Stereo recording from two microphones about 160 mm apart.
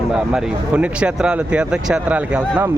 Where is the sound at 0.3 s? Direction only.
5° right (ahead or behind).